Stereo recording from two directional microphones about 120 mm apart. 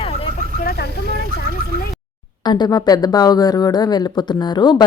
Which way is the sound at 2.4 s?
35° left (ahead or behind).